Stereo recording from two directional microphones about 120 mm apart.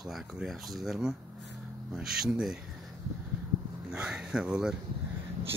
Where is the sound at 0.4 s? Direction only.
Centre (ahead or behind).